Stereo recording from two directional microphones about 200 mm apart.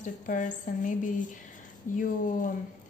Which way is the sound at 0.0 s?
40° left (ahead or behind).